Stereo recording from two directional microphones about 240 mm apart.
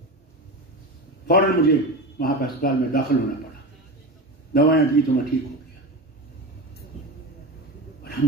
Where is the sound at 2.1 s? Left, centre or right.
Left.